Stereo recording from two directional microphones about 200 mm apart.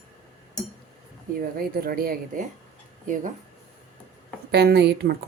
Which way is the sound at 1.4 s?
45° right (ahead or behind).